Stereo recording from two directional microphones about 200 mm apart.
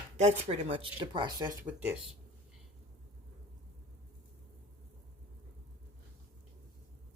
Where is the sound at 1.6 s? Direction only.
5° right (ahead or behind).